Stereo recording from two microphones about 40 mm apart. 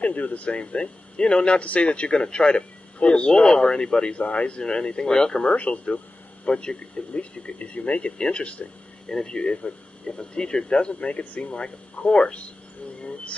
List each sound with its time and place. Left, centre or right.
0.0 s speech: left
4.2 s speech: left
5.6 s speech: left
11.6 s speech: left
13.0 s a sound: left